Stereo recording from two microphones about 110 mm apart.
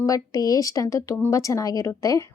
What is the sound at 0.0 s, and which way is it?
A woman's voice, 30° left (ahead or behind).